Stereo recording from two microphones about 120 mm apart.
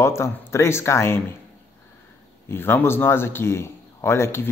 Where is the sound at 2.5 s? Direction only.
20° left (ahead or behind).